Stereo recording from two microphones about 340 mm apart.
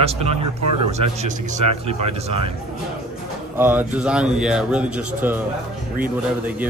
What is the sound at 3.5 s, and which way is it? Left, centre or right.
A man's voice, centre.